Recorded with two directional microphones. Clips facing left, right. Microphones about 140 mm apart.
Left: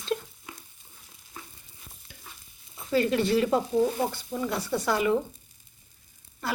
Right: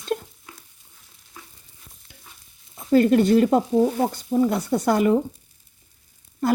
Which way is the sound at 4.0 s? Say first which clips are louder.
Right 8 dB; 35° right (ahead or behind).